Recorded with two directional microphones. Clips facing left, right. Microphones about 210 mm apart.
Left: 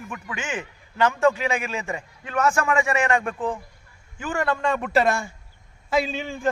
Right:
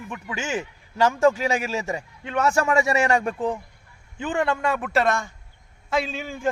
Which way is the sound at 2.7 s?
40° right (ahead or behind).